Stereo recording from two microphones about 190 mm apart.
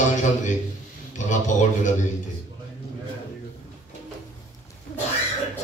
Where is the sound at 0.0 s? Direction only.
40° left (ahead or behind).